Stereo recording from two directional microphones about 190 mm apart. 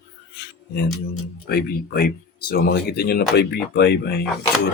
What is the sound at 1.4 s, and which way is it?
Speech, 55° left (ahead or behind).